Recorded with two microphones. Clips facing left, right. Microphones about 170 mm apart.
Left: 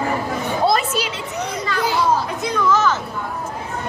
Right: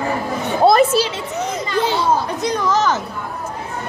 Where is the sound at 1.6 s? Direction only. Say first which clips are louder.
Right 1 dB; 25° right (ahead or behind).